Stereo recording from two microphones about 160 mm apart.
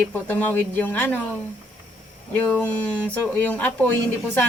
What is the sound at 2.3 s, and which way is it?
A woman's voice, 10° left (ahead or behind).